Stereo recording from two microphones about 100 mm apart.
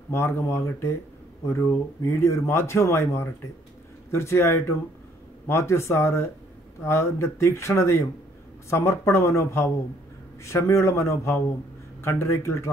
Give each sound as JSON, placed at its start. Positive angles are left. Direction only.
{"t": 0.1, "sound": "speech", "side_deg": 25}